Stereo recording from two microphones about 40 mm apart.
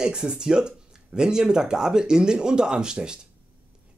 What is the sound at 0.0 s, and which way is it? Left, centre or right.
Speech, centre.